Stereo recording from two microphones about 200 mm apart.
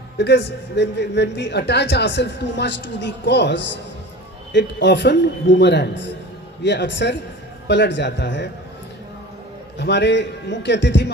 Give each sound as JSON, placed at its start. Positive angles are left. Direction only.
{"t": 0.2, "sound": "a man's voice", "side_deg": 60}
{"t": 9.7, "sound": "a man's voice", "side_deg": 60}